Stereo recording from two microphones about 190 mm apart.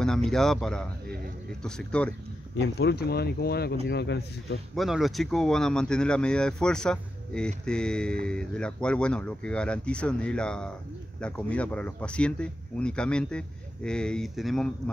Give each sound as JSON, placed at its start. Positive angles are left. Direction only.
{"t": 0.0, "sound": "speech", "side_deg": 5}
{"t": 2.5, "sound": "speech", "side_deg": 65}
{"t": 4.7, "sound": "speech", "side_deg": 0}